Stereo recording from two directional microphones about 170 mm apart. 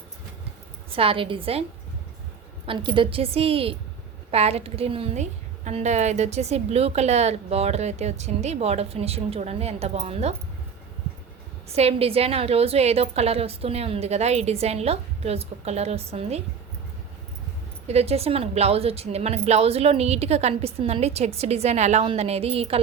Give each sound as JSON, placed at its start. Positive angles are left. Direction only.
{"t": 0.9, "sound": "a woman's voice", "side_deg": -35}
{"t": 2.6, "sound": "a woman's voice", "side_deg": -30}
{"t": 11.7, "sound": "a woman's voice", "side_deg": -35}
{"t": 17.8, "sound": "a woman's voice", "side_deg": -40}